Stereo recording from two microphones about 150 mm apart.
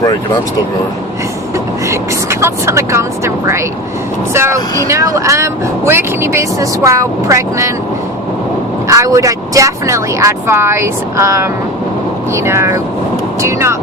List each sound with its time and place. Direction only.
1.9 s speech: 20° right (ahead or behind)
8.9 s speech: 20° right (ahead or behind)